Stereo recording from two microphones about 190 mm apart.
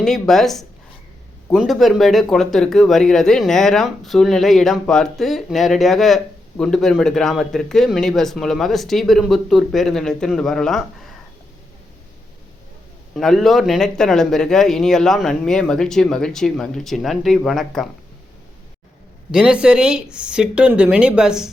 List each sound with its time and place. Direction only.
0.0 s speech: centre (ahead or behind)
13.1 s speech: centre (ahead or behind)
19.3 s speech: 5° right (ahead or behind)